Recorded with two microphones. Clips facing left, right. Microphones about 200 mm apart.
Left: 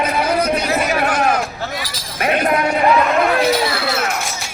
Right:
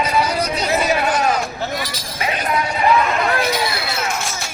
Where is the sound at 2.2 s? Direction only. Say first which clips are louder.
Left 5 dB; 60° left (ahead or behind).